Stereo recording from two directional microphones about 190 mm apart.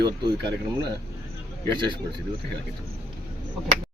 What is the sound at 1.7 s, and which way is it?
Speech, 25° right (ahead or behind).